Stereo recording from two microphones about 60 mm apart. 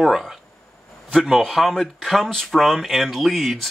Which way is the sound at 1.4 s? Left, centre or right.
Centre.